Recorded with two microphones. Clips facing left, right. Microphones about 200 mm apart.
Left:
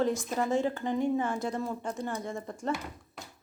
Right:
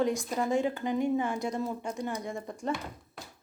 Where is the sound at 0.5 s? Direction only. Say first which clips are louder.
Right 1 dB; 15° right (ahead or behind).